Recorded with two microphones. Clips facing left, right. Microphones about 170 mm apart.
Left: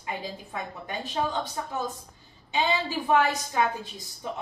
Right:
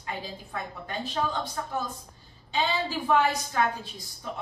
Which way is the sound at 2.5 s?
15° left (ahead or behind).